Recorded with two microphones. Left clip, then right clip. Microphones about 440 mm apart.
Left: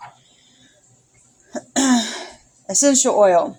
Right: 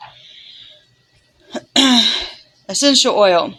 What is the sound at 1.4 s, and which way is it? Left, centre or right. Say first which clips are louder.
Throat clearing: right 6 dB; right.